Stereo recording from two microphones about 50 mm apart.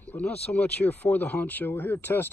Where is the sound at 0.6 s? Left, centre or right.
Left.